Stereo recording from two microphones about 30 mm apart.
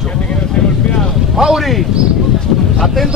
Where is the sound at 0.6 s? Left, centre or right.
Left.